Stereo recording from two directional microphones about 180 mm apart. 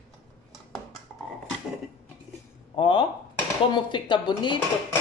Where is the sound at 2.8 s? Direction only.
30° left (ahead or behind).